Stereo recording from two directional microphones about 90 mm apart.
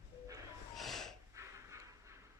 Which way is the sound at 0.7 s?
Centre (ahead or behind).